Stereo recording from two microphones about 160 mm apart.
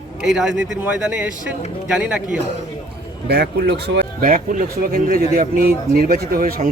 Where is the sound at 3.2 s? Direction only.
90° right.